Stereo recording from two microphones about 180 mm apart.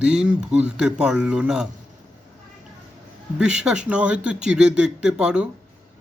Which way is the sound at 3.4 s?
5° right (ahead or behind).